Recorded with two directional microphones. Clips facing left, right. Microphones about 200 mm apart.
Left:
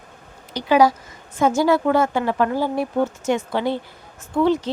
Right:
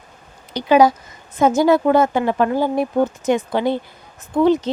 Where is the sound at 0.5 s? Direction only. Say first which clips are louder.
Right 3 dB; 20° right (ahead or behind).